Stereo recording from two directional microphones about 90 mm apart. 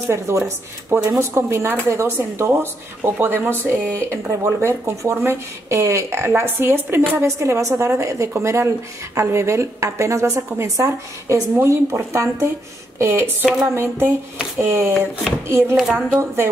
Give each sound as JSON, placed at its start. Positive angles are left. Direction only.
{"t": 0.3, "sound": "a woman's voice", "side_deg": -30}
{"t": 15.7, "sound": "a woman's voice", "side_deg": -5}